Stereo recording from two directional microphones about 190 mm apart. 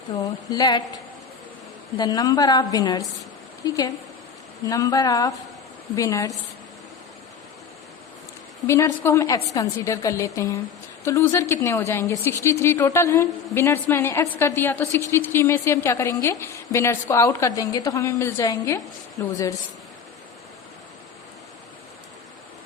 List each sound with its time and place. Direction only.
0.2 s a woman's voice: 20° left (ahead or behind)
2.0 s a woman's voice: 20° left (ahead or behind)
8.6 s a woman's voice: 15° left (ahead or behind)